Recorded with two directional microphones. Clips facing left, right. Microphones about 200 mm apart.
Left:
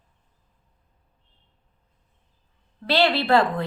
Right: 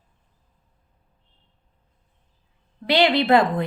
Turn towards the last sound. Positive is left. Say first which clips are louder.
# right 2 dB
turn(degrees=-20)  # may be behind; listen again after turning